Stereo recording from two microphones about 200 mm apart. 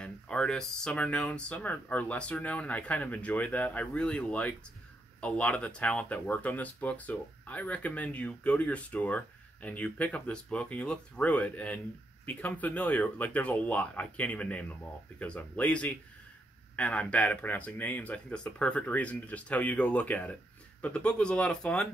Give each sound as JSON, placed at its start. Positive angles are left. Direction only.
{"t": 0.0, "sound": "speech", "side_deg": 5}